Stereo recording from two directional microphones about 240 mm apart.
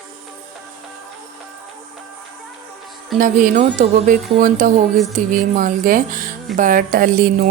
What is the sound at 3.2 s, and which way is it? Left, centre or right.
Speech, right.